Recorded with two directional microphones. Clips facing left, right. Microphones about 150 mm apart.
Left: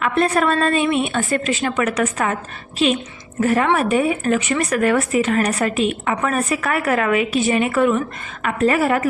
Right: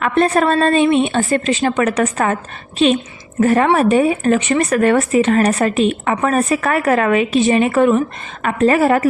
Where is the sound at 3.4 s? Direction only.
40° right (ahead or behind).